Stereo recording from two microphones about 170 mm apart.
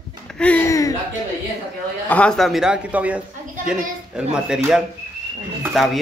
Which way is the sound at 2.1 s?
5° left (ahead or behind).